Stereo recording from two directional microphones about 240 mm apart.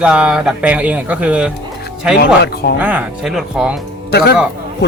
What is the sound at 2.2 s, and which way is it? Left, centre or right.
Speech, left.